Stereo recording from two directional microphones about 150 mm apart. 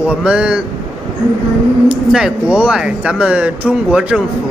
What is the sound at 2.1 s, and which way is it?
Speech, 5° right (ahead or behind).